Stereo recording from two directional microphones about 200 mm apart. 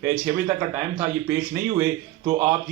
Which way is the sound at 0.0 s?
10° right (ahead or behind).